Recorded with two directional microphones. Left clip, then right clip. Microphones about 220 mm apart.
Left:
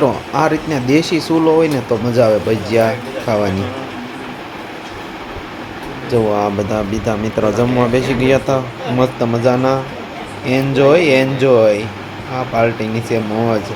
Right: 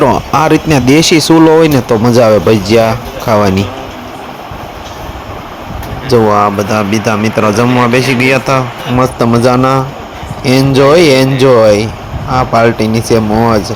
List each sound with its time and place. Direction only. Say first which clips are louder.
0.3 s speech: right 7 dB; 35° right (ahead or behind)
6.1 s speech: right 8 dB; 20° right (ahead or behind)
6.6 s a man's voice: right 7 dB; 5° right (ahead or behind)
8.5 s speech: right 5 dB; 30° right (ahead or behind)